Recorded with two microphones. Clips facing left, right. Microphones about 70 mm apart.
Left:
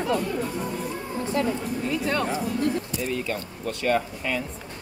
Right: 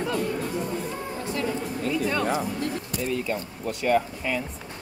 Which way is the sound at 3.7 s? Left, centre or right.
Centre.